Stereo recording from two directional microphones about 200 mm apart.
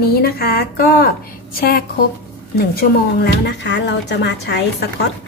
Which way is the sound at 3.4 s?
60° left (ahead or behind).